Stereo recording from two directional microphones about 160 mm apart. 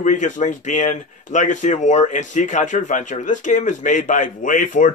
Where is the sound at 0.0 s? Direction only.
50° left (ahead or behind).